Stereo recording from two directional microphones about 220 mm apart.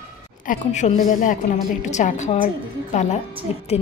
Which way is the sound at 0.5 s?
30° left (ahead or behind).